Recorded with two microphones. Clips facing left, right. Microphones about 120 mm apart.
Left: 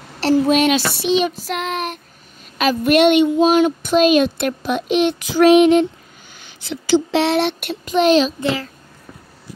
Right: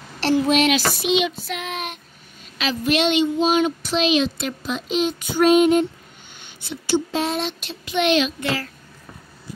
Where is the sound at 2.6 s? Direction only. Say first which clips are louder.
Left 7 dB; 55° left (ahead or behind).